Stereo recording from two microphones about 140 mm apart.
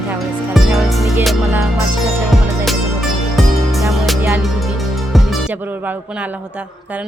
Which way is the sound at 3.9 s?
Centre (ahead or behind).